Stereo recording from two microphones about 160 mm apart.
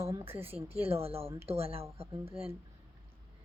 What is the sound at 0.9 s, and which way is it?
Speech, 35° right (ahead or behind).